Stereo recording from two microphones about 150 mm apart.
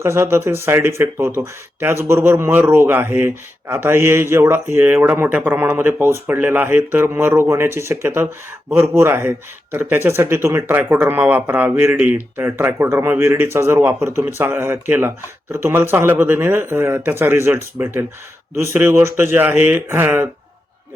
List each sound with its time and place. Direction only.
0.0 s a man's voice: 15° right (ahead or behind)